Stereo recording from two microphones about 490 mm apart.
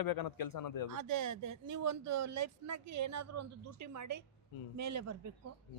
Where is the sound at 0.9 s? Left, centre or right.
Right.